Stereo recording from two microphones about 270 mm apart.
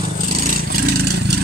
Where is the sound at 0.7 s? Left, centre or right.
Right.